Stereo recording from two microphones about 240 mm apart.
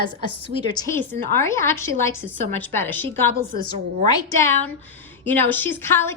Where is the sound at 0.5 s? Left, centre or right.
Centre.